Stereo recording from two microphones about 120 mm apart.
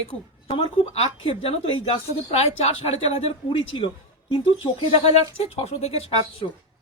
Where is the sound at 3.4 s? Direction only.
45° left (ahead or behind).